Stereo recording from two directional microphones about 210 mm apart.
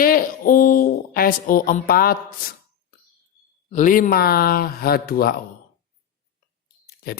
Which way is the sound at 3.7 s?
35° left (ahead or behind).